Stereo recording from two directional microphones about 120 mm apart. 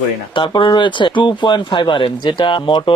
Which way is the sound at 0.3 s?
45° left (ahead or behind).